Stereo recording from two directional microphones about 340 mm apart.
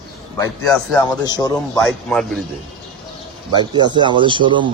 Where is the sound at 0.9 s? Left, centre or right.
Centre.